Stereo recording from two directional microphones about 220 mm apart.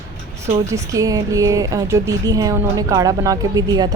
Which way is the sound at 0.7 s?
15° right (ahead or behind).